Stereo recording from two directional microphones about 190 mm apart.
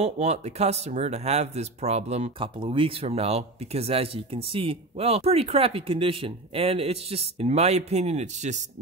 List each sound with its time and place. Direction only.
0.0 s speech: 35° right (ahead or behind)